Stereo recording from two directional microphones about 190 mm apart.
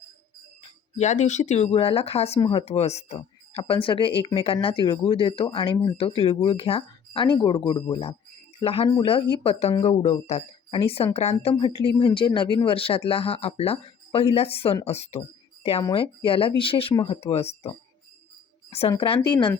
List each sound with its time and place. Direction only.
0.9 s speech: 35° left (ahead or behind)
18.7 s speech: 30° left (ahead or behind)